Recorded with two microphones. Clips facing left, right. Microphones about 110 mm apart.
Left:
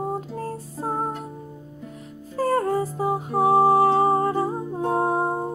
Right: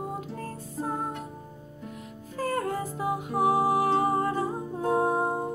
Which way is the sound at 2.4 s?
35° left (ahead or behind).